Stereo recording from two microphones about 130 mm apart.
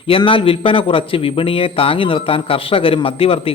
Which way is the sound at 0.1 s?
45° left (ahead or behind).